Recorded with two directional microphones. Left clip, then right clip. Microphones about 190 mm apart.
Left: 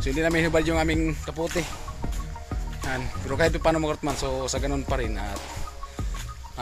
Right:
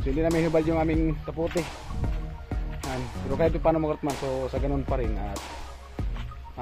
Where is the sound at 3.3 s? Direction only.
15° left (ahead or behind).